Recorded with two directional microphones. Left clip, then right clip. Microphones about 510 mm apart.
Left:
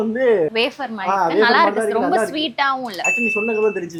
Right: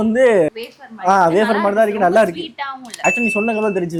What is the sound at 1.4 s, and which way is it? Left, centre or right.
A woman's voice, centre.